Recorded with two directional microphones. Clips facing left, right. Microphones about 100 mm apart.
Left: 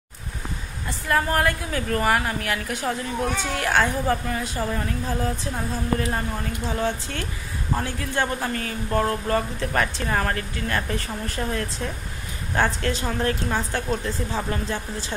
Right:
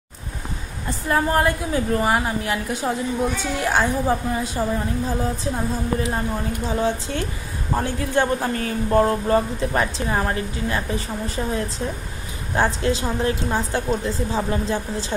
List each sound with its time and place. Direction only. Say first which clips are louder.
1.0 s a woman's voice: right 2 dB; 25° right (ahead or behind)